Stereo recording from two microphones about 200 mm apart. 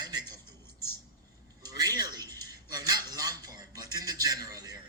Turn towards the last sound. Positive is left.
turn(degrees=-20)  # may be behind; listen again after turning